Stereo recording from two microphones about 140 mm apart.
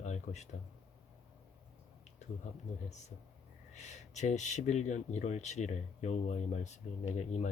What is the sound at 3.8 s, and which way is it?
Speech, 55° left (ahead or behind).